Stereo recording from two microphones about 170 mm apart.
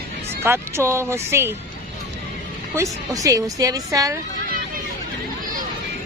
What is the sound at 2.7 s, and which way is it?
A woman's voice, 20° right (ahead or behind).